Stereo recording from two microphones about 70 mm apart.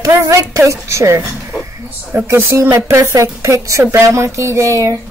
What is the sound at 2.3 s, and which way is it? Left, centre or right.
A woman's voice, right.